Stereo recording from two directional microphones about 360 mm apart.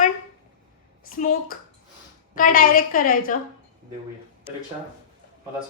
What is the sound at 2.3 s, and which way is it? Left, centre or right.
A woman's voice, left.